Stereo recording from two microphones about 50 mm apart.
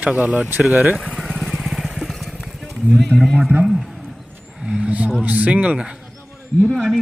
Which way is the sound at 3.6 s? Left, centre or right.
Centre.